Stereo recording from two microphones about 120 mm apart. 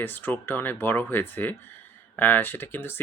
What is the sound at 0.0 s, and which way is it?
Speech, 15° left (ahead or behind).